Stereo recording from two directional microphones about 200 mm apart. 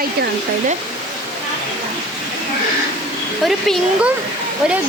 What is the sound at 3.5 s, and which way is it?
Speech, centre (ahead or behind).